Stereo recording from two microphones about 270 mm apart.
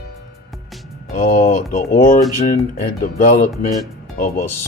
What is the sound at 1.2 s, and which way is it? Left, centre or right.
Speech, left.